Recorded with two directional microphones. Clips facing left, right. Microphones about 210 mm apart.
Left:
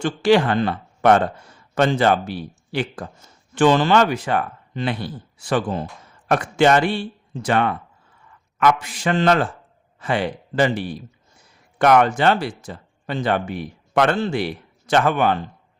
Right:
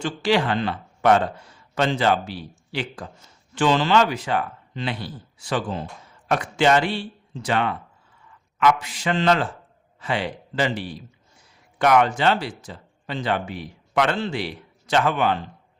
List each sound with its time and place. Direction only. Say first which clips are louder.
0.0 s speech: left 5 dB; 50° left (ahead or behind)